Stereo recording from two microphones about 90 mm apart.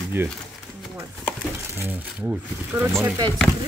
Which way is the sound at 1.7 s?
20° right (ahead or behind).